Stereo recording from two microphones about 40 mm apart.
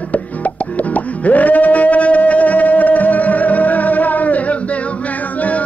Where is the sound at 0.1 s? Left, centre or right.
Left.